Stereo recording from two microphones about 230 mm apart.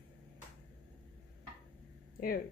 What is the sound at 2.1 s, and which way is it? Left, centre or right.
Speech, left.